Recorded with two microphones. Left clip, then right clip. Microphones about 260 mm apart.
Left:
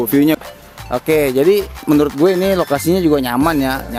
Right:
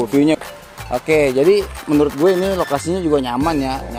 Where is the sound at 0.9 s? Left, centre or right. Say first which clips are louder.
Left 1 dB; left.